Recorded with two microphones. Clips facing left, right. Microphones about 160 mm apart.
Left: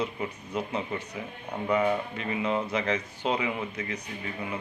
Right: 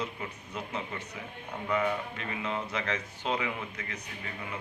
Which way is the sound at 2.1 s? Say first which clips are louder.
Left 6 dB; 20° left (ahead or behind).